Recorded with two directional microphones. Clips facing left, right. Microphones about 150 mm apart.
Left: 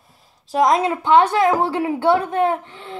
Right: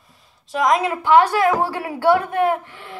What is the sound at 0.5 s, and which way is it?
A woman's voice, 30° left (ahead or behind).